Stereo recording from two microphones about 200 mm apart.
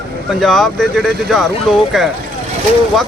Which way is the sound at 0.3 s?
Centre (ahead or behind).